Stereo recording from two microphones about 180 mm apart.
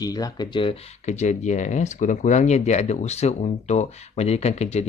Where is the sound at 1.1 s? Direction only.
40° left (ahead or behind).